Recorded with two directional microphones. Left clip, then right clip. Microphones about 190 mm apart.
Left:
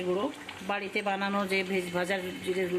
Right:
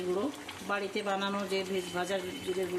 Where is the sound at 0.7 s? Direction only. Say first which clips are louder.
Left 2 dB; 10° left (ahead or behind).